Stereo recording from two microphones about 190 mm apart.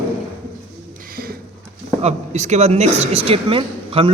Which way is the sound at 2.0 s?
35° right (ahead or behind).